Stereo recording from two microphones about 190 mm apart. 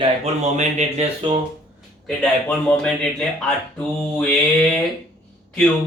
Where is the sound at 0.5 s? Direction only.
35° right (ahead or behind).